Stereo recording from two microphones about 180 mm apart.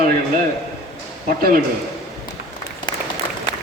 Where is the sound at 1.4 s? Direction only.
55° right (ahead or behind).